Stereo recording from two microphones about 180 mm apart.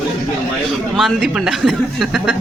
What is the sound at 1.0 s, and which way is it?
Speech, centre (ahead or behind).